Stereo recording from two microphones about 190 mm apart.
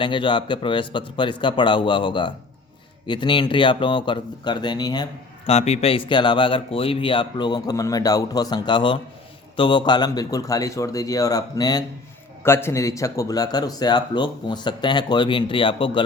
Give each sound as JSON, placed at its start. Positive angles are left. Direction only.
{"t": 0.0, "sound": "speech", "side_deg": 25}
{"t": 5.5, "sound": "speech", "side_deg": 35}